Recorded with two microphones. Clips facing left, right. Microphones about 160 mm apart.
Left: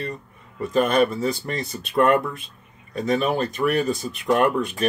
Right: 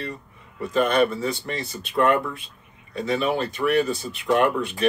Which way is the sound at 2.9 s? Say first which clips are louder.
Left 2 dB; 45° left (ahead or behind).